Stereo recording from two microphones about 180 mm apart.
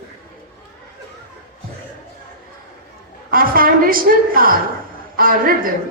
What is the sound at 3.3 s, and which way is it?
A woman's voice, 55° right (ahead or behind).